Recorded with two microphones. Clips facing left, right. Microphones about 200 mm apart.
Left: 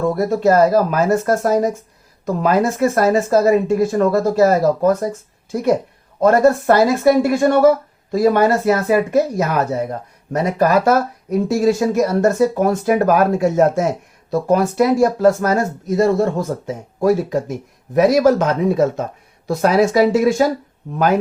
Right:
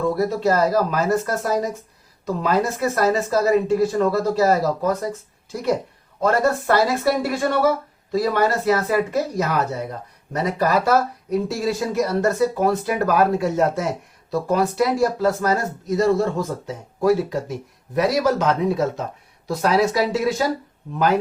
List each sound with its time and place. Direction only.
0.3 s speech: 50° left (ahead or behind)